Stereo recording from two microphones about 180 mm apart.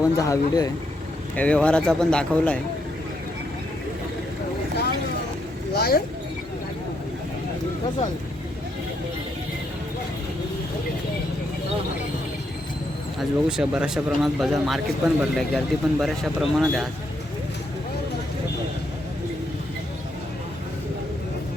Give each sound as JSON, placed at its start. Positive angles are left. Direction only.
{"t": 0.0, "sound": "speech", "side_deg": 20}
{"t": 1.4, "sound": "speech", "side_deg": 5}
{"t": 5.7, "sound": "vehicle", "side_deg": 60}
{"t": 13.1, "sound": "speech", "side_deg": -5}